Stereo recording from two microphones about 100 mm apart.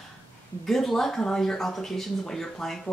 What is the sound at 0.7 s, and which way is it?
Speech, centre (ahead or behind).